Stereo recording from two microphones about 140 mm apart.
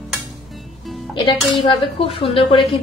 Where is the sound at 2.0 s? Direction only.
40° left (ahead or behind).